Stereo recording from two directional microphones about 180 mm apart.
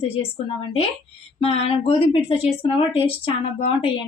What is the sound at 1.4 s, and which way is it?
A woman's voice, 35° left (ahead or behind).